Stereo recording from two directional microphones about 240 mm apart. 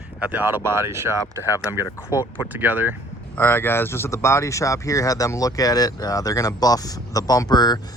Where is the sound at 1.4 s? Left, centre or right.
Centre.